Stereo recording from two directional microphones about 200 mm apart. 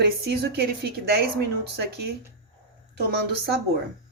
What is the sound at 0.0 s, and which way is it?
A woman's voice, 55° right (ahead or behind).